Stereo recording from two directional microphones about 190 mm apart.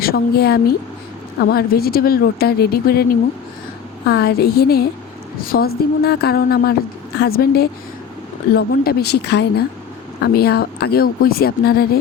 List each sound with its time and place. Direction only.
0.0 s a woman's voice: 55° left (ahead or behind)